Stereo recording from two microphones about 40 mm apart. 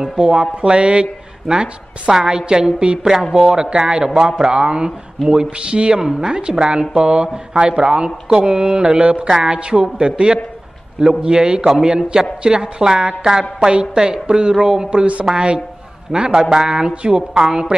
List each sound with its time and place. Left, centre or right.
0.0 s speech: right
5.9 s speech: centre; by 17.4 s right
17.4 s speech: centre